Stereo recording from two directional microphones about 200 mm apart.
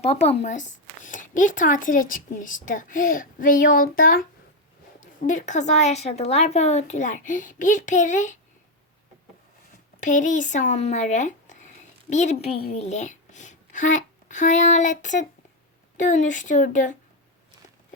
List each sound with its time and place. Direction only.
0.0 s speech: 30° left (ahead or behind)
10.0 s a child's voice: 40° left (ahead or behind)